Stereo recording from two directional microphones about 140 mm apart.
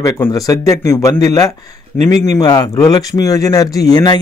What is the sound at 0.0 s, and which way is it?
Speech, 25° left (ahead or behind).